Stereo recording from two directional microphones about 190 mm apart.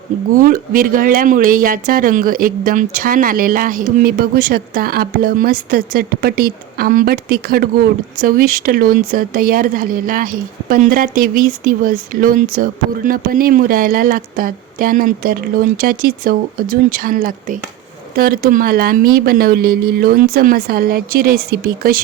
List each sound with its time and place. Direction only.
0.3 s speech: 45° right (ahead or behind)